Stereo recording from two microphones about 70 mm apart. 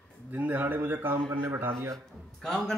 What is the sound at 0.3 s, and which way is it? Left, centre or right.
Speech, right.